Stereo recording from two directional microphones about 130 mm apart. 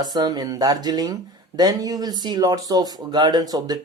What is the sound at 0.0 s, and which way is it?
Speech, 30° right (ahead or behind).